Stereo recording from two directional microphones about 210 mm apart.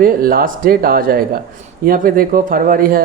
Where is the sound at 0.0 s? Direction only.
45° right (ahead or behind).